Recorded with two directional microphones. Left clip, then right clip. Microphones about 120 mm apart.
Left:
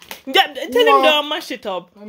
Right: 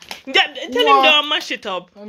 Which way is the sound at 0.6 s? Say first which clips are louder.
Left 3 dB; 60° left (ahead or behind).